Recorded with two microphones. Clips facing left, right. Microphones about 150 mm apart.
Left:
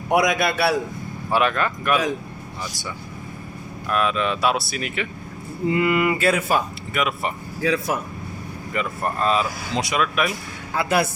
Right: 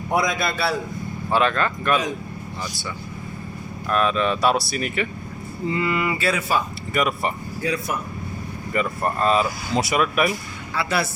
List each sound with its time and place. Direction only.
0.1 s a man's voice: 75° left (ahead or behind)
1.3 s speech: 10° left (ahead or behind)
3.8 s speech: 5° left (ahead or behind)
5.7 s speech: 55° left (ahead or behind)
6.9 s speech: centre (ahead or behind)
7.6 s speech: 90° left
8.7 s speech: centre (ahead or behind)
10.8 s speech: 50° left (ahead or behind)